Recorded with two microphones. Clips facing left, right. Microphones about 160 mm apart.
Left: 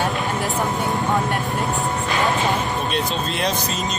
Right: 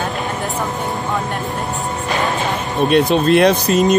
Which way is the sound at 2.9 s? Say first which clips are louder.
Right 11 dB; 65° right (ahead or behind).